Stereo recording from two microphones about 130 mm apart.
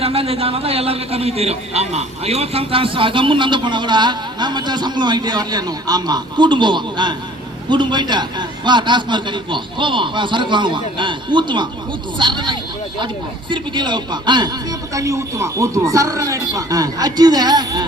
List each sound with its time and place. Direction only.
0.0 s a man's voice: 50° right (ahead or behind); by 17.8 s 30° right (ahead or behind)